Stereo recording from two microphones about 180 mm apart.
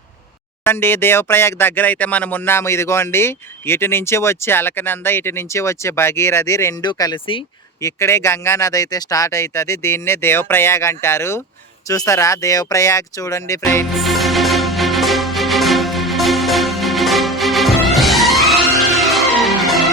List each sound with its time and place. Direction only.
0.6 s speech: 10° left (ahead or behind)
13.9 s music: centre (ahead or behind)